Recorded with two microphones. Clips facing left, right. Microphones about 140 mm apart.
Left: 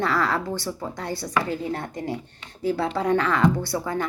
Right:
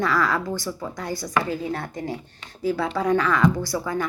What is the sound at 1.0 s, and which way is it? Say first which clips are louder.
Speech: right 1 dB; 65° left (ahead or behind).